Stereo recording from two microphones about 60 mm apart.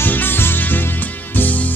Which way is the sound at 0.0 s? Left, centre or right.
Left.